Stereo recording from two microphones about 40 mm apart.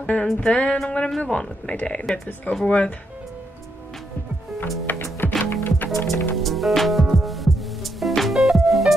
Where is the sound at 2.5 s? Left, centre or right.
Left.